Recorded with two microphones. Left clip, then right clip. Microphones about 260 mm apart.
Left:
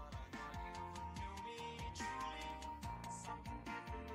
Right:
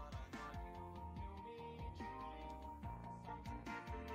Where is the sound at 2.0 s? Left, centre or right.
Left.